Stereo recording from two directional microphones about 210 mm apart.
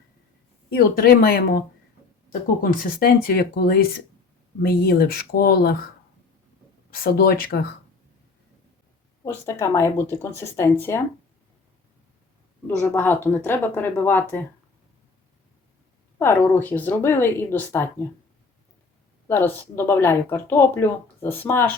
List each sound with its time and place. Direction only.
0.7 s speech: 45° left (ahead or behind)
6.9 s speech: 45° left (ahead or behind)
9.5 s speech: 15° left (ahead or behind)
12.8 s speech: 10° left (ahead or behind)
16.1 s speech: 10° left (ahead or behind)
19.3 s speech: 10° left (ahead or behind)